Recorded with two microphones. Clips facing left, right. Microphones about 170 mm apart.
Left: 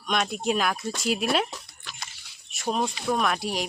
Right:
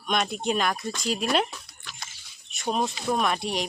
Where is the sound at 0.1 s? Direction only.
Centre (ahead or behind).